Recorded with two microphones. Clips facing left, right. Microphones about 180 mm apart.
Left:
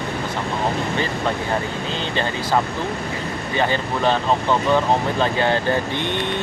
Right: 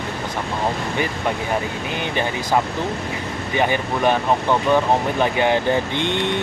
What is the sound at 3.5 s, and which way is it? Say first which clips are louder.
Speech: right 1 dB; 15° right (ahead or behind).